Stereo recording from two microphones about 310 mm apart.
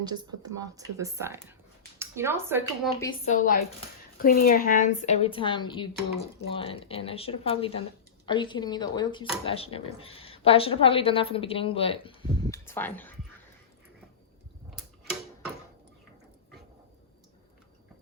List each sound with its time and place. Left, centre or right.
0.0 s speech: centre
3.2 s a woman's voice: left; by 13.1 s centre
14.8 s a sound: centre